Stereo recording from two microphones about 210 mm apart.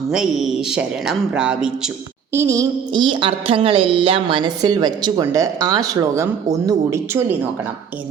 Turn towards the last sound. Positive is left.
turn(degrees=-15)  # may be behind; listen again after turning